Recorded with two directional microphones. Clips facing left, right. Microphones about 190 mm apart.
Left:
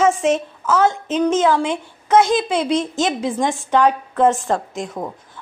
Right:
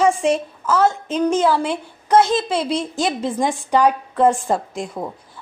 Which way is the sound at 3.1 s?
5° left (ahead or behind).